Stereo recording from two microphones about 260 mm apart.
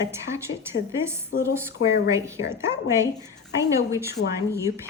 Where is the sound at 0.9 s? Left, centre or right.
Centre.